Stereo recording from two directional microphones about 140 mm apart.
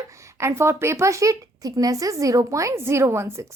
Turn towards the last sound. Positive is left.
turn(degrees=-20)  # may be behind; listen again after turning